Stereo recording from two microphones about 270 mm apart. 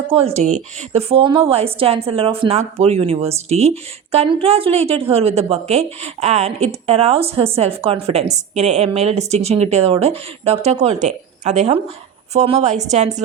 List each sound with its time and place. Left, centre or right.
0.1 s a woman's voice: right